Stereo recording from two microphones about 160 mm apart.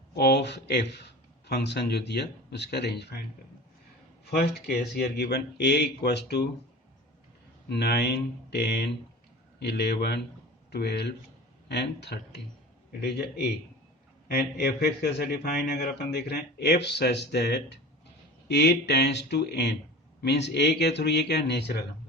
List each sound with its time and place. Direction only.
0.2 s a man's voice: 90° left
4.3 s a man's voice: 75° left (ahead or behind)
7.7 s a man's voice: 90° left
13.0 s a man's voice: 80° left